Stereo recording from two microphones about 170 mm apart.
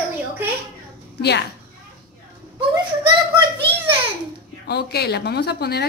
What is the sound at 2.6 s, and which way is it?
Speech, 30° right (ahead or behind).